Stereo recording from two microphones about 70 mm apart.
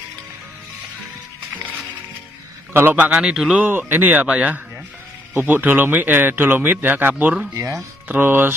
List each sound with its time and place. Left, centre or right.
2.7 s a man's voice: right
3.0 s a man's voice: centre
3.6 s speech: right